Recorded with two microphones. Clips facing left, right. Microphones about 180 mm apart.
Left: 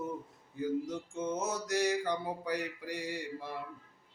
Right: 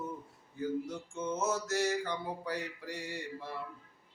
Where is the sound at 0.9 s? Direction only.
15° left (ahead or behind).